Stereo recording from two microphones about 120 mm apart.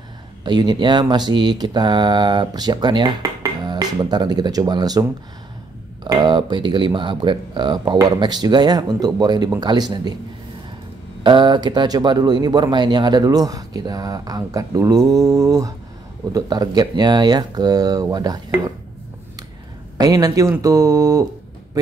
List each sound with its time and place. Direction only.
0.4 s speech: 40° right (ahead or behind)
6.0 s speech: 40° right (ahead or behind)
11.2 s speech: 40° right (ahead or behind)
20.0 s speech: 30° right (ahead or behind)